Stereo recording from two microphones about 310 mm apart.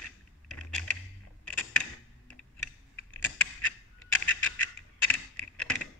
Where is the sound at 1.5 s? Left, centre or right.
Centre.